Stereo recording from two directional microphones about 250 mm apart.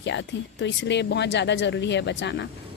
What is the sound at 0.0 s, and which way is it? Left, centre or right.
Speech, left.